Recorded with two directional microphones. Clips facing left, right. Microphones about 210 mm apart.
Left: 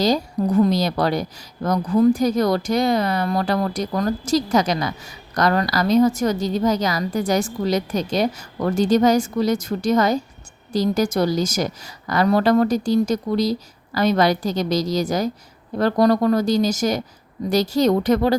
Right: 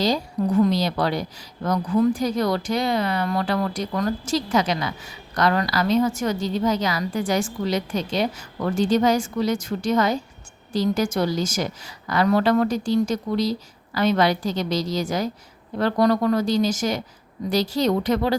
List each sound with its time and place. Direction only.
0.0 s a woman's voice: 40° left (ahead or behind)